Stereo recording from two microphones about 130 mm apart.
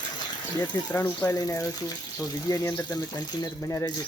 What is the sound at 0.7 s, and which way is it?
Speech, 20° left (ahead or behind).